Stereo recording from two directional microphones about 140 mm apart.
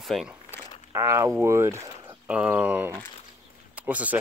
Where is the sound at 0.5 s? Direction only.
20° right (ahead or behind).